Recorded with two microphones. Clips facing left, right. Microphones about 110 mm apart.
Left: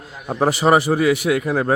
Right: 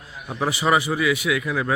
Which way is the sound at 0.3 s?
40° left (ahead or behind).